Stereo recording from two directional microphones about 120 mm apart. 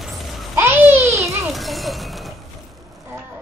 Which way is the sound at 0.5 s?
20° right (ahead or behind).